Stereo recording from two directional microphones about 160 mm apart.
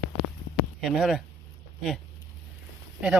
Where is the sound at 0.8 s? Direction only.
Centre (ahead or behind).